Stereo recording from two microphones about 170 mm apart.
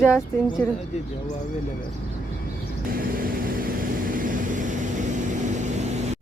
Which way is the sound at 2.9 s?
55° right (ahead or behind).